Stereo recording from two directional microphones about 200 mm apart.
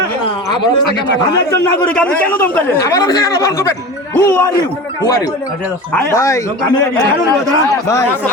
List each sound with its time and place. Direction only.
2.0 s speech: 10° left (ahead or behind)
5.9 s speech: 10° left (ahead or behind)